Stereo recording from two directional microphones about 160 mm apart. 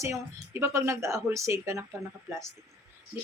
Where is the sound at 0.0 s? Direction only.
20° right (ahead or behind).